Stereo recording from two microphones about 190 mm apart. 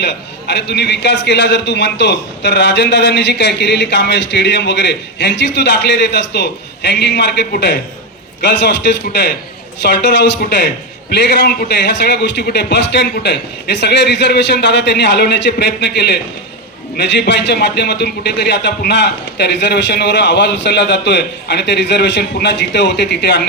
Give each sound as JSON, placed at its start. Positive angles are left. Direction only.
{"t": 0.0, "sound": "a man's voice", "side_deg": 65}